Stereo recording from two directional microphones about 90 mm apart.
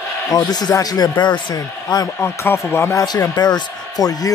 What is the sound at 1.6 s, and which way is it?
Speech, 45° left (ahead or behind).